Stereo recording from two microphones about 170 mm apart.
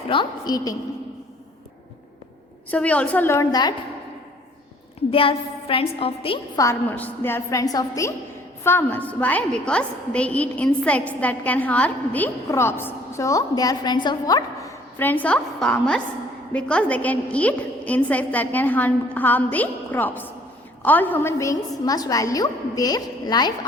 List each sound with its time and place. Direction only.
0.1 s a woman's voice: 25° left (ahead or behind)
2.6 s a woman's voice: 10° left (ahead or behind); by 3.8 s 25° left (ahead or behind)
5.1 s a woman's voice: 35° left (ahead or behind)
6.6 s a woman's voice: 15° left (ahead or behind)